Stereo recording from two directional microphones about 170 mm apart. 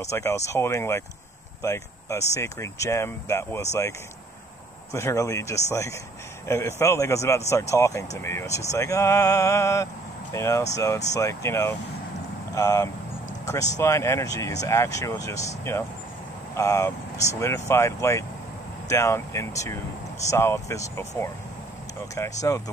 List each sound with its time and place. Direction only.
0.0 s speech: 15° left (ahead or behind)
4.9 s speech: 20° left (ahead or behind)
22.5 s speech: 20° left (ahead or behind)